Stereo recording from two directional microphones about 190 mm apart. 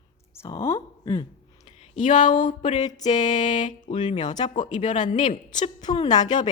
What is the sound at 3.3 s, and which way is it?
Speech, 40° left (ahead or behind).